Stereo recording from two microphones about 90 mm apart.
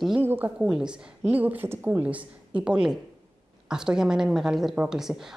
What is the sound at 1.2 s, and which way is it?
A woman's voice, 20° right (ahead or behind).